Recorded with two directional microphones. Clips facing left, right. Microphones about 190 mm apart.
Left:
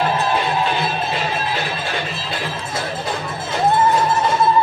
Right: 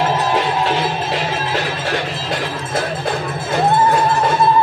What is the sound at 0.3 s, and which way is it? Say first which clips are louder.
Music: right 2 dB; 90° right.